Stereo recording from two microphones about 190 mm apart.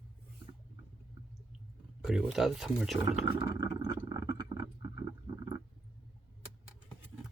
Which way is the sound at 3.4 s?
20° right (ahead or behind).